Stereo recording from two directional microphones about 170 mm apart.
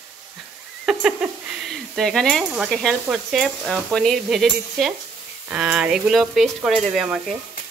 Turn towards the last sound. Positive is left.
turn(degrees=-5)  # may be behind; listen again after turning